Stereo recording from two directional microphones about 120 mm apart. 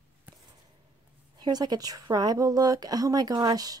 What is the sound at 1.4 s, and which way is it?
Speech, 35° right (ahead or behind).